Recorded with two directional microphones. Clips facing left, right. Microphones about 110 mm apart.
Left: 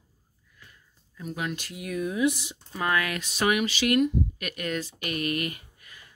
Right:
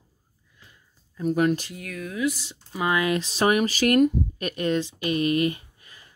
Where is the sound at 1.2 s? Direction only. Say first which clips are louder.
Right 11 dB; 45° right (ahead or behind).